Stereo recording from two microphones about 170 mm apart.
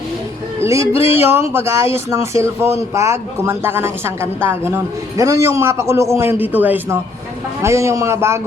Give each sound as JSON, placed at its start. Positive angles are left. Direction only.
{"t": 0.6, "sound": "speech", "side_deg": -15}